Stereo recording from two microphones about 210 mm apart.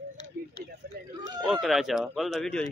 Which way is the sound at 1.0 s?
45° right (ahead or behind).